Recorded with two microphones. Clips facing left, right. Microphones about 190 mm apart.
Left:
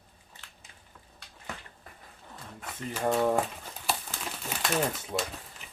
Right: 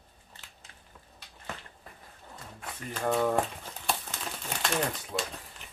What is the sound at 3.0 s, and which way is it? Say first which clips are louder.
Speech: left 1 dB; 10° left (ahead or behind).